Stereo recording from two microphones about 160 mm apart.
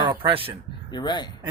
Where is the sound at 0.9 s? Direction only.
30° left (ahead or behind).